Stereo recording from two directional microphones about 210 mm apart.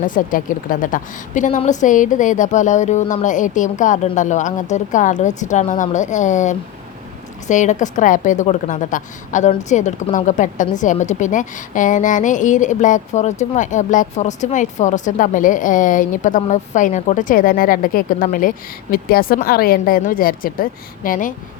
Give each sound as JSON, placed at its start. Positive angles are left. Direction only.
{"t": 0.0, "sound": "a woman's voice", "side_deg": 40}